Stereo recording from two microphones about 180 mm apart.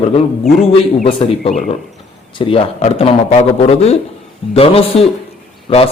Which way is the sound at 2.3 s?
30° left (ahead or behind).